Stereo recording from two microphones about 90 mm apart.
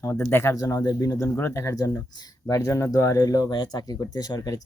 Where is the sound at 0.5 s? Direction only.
45° left (ahead or behind).